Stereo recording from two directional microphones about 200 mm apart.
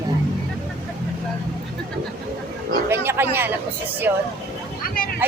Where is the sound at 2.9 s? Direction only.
10° right (ahead or behind).